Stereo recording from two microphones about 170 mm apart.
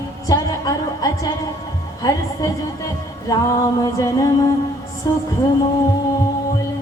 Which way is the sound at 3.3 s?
20° left (ahead or behind).